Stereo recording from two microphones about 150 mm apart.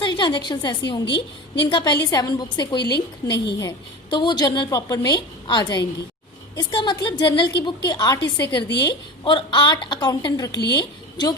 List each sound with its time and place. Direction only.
0.0 s a woman's voice: 30° left (ahead or behind)